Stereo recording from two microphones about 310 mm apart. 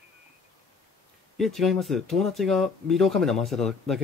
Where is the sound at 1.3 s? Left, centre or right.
Centre.